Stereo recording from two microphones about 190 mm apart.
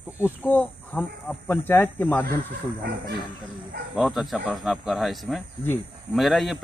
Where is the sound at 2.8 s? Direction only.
55° right (ahead or behind).